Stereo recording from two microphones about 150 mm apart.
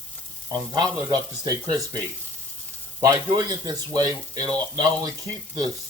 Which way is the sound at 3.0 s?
25° right (ahead or behind).